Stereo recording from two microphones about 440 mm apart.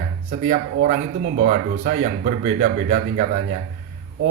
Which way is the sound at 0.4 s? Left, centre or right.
Centre.